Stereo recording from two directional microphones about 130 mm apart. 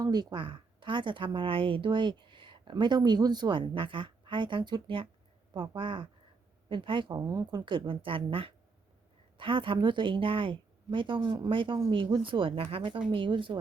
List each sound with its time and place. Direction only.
0.0 s a woman's voice: 30° right (ahead or behind)
7.2 s a woman's voice: 25° right (ahead or behind)